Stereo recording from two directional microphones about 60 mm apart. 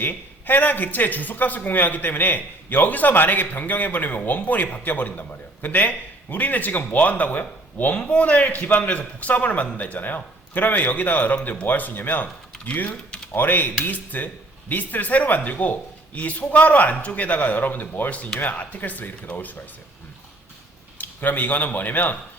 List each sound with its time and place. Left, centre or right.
0.0 s a man's voice: left
21.0 s speech: left